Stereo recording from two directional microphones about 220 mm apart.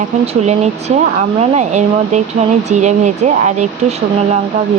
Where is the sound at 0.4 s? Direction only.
30° right (ahead or behind).